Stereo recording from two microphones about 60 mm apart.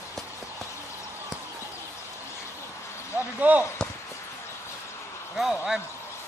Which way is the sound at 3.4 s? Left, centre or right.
Right.